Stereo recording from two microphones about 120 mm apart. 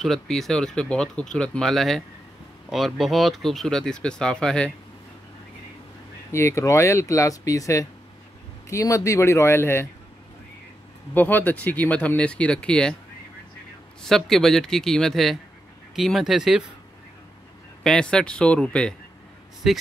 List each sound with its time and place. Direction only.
0.0 s speech: centre (ahead or behind)
6.3 s speech: 25° left (ahead or behind)
11.1 s speech: 15° left (ahead or behind)
14.0 s speech: 5° left (ahead or behind)
17.8 s speech: 5° left (ahead or behind)
19.6 s speech: 5° right (ahead or behind)